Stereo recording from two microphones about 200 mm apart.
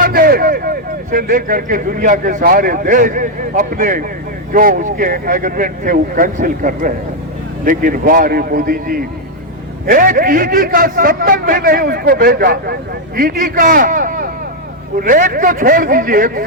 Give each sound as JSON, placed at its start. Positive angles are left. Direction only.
{"t": 0.0, "sound": "speech", "side_deg": -45}